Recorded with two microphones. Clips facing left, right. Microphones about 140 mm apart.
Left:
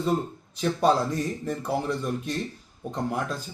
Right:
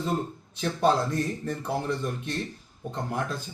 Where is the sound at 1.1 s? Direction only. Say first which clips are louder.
Left 1 dB; 35° left (ahead or behind).